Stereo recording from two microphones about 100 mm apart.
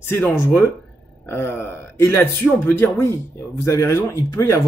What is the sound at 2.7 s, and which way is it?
Speech, 20° left (ahead or behind).